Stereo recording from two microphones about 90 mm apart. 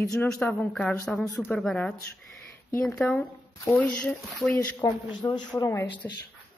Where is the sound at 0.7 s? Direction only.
10° left (ahead or behind).